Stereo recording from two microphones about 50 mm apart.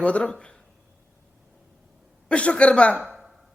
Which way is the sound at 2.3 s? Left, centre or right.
Left.